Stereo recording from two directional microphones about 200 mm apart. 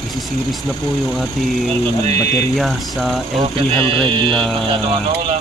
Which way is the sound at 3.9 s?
25° right (ahead or behind).